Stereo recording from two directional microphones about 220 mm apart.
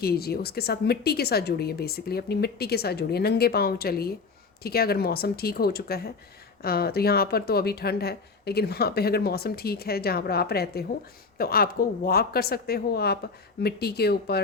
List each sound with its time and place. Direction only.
0.0 s speech: 45° left (ahead or behind)